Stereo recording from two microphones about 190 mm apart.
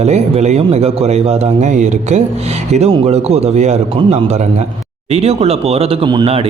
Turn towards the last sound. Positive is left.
turn(degrees=-30)  # may be behind; listen again after turning